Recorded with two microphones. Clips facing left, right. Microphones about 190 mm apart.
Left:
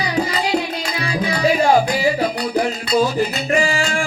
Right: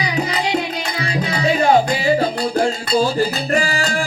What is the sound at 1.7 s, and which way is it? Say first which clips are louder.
Music: right 1 dB; 25° right (ahead or behind).